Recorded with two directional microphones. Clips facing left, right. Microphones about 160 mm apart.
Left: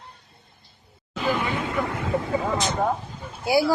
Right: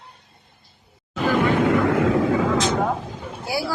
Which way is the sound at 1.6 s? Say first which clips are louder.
Right 9 dB; 90° right.